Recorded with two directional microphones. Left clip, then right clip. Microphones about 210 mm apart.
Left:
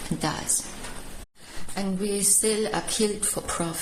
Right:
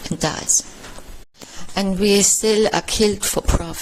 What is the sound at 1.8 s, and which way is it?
Speech, 45° right (ahead or behind).